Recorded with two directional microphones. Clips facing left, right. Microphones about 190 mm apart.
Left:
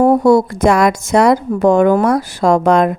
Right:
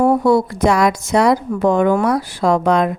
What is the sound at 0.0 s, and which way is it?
Speech, 40° left (ahead or behind).